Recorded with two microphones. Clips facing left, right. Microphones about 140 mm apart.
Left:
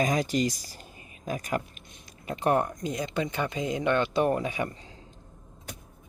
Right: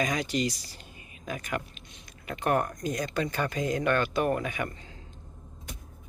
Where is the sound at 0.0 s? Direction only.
40° left (ahead or behind).